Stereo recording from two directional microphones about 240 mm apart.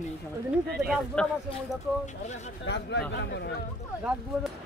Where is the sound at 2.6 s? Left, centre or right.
Left.